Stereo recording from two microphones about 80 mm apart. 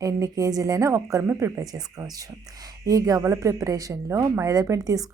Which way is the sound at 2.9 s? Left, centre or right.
Right.